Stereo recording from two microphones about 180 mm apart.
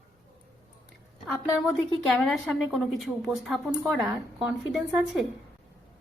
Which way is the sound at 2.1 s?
Centre (ahead or behind).